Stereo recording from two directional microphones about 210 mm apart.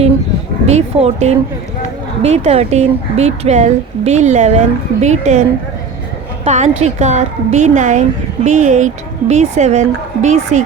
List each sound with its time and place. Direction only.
0.7 s speech: 30° right (ahead or behind)
6.4 s speech: 30° right (ahead or behind)